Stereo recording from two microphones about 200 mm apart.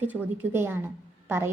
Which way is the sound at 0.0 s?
10° right (ahead or behind).